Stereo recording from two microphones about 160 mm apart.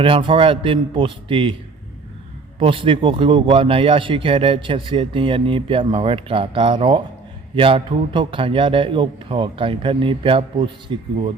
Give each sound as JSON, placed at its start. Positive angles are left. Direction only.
{"t": 0.0, "sound": "speech", "side_deg": -30}
{"t": 2.6, "sound": "speech", "side_deg": -35}